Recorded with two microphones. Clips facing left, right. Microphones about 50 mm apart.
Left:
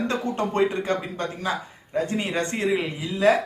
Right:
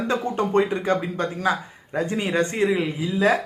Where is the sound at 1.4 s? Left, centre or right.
Right.